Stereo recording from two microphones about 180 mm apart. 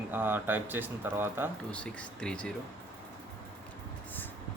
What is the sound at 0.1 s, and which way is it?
Speech, 10° right (ahead or behind).